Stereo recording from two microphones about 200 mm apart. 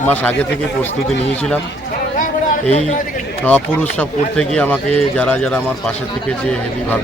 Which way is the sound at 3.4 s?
10° left (ahead or behind).